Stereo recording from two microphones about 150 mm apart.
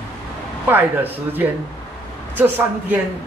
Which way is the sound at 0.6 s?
15° right (ahead or behind).